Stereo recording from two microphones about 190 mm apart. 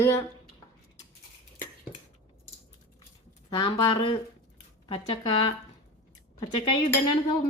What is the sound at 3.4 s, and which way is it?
Speech, 25° left (ahead or behind).